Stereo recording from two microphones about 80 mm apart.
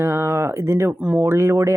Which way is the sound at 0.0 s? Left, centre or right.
Right.